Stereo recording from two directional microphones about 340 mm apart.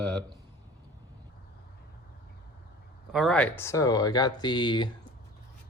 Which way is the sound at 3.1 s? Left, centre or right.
Centre.